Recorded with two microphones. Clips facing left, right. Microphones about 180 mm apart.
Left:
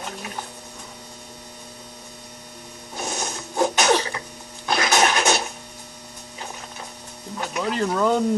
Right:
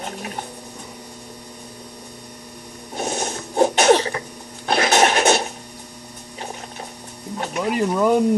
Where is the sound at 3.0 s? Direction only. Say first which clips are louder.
Right 5 dB; 30° right (ahead or behind).